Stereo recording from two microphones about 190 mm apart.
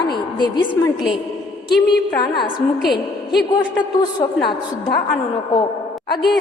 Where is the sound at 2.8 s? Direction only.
Centre (ahead or behind).